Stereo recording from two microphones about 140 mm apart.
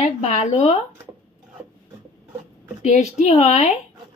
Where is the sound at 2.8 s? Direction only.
55° left (ahead or behind).